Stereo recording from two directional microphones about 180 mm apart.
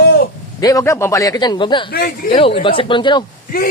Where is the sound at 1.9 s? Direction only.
60° left (ahead or behind).